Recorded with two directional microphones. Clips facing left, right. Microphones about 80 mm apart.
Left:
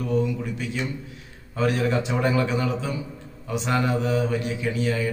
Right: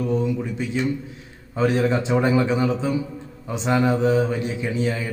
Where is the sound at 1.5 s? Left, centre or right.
Right.